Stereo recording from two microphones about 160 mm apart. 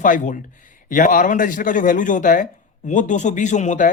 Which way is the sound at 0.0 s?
55° left (ahead or behind).